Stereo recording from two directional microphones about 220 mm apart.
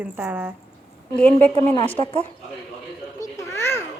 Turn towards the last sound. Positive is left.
turn(degrees=10)  # may be behind; listen again after turning